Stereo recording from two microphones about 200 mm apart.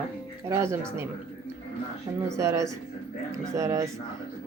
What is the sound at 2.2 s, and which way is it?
Speech, 15° right (ahead or behind).